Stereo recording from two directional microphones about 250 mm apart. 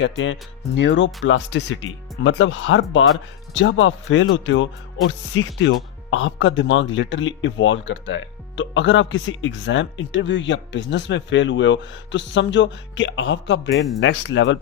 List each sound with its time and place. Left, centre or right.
0.0 s speech: left